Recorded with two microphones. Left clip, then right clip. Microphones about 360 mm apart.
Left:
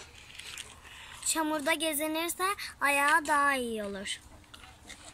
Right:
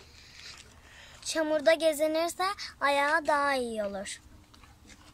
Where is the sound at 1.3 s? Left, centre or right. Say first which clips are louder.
Right 5 dB; right.